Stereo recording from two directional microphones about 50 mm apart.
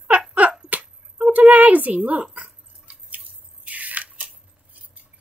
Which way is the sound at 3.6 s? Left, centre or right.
Right.